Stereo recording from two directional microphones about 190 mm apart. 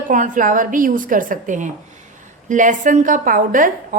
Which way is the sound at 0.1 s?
45° right (ahead or behind).